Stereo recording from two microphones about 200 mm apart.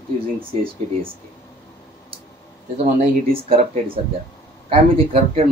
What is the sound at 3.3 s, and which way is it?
Speech, 30° right (ahead or behind).